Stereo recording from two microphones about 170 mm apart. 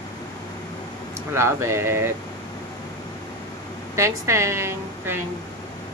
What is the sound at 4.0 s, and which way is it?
A woman's voice, 15° right (ahead or behind).